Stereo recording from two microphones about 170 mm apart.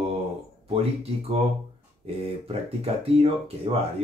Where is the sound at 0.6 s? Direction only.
35° right (ahead or behind).